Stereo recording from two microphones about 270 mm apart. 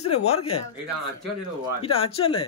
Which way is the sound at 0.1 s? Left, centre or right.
Left.